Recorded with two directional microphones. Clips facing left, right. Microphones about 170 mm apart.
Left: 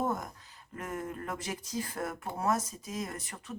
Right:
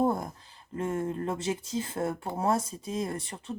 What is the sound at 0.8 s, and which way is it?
Speech, 25° right (ahead or behind).